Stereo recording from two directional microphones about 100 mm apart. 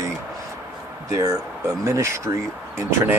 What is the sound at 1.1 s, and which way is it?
Speech, 35° right (ahead or behind).